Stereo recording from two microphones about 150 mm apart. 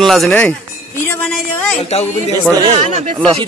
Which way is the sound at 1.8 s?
45° left (ahead or behind).